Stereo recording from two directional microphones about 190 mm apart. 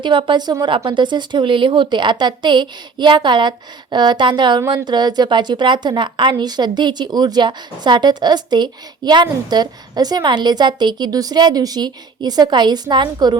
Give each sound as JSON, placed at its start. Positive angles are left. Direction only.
{"t": 0.0, "sound": "a woman's voice", "side_deg": -25}